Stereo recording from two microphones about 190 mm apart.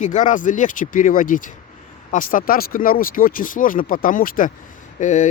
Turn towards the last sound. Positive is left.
turn(degrees=40)  # may be behind; listen again after turning